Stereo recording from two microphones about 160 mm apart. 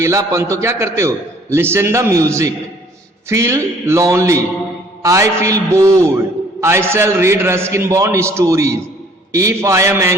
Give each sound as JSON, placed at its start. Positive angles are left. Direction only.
{"t": 0.0, "sound": "a man's voice", "side_deg": -20}